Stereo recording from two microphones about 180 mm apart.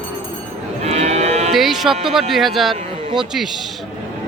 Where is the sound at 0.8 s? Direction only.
35° right (ahead or behind).